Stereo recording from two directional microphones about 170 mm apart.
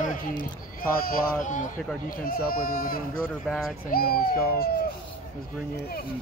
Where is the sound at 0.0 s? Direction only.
50° left (ahead or behind).